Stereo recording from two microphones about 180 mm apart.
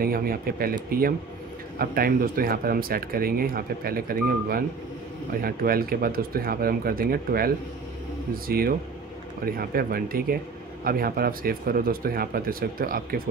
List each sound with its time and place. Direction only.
0.0 s speech: 55° right (ahead or behind)